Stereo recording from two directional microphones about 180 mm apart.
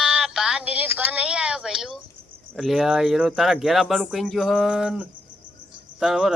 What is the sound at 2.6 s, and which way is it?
Speech, centre (ahead or behind).